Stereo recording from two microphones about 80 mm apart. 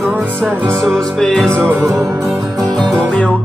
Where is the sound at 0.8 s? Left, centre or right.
Centre.